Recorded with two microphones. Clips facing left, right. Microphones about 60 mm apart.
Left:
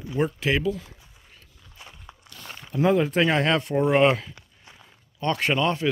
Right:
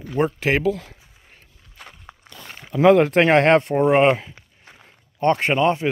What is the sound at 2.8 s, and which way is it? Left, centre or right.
Speech, right.